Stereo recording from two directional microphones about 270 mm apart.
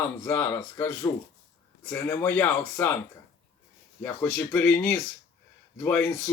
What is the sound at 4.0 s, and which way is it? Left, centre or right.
Speech, centre.